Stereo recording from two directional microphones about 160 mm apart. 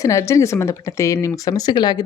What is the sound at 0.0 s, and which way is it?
A woman's voice, 20° left (ahead or behind).